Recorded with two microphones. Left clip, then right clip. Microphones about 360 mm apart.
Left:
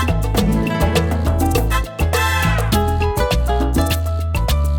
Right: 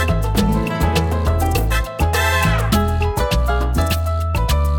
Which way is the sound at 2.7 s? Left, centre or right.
Left.